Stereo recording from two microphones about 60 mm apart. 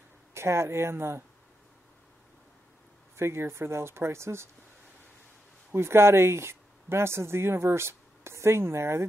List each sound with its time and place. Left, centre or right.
0.3 s speech: right
3.2 s speech: right
5.7 s speech: right